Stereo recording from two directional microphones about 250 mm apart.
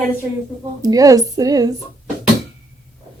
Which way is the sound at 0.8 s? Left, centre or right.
Centre.